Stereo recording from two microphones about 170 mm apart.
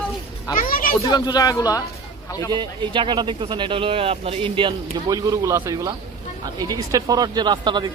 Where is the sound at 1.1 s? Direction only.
25° left (ahead or behind).